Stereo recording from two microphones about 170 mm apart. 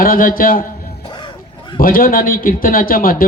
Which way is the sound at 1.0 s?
30° left (ahead or behind).